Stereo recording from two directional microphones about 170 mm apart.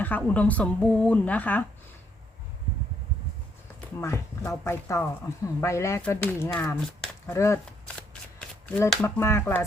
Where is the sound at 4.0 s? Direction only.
15° left (ahead or behind).